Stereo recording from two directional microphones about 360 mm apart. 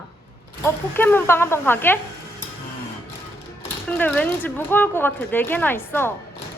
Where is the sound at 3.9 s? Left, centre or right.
Centre.